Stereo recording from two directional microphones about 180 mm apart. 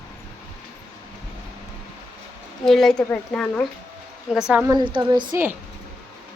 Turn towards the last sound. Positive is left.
turn(degrees=-25)  # may be behind; listen again after turning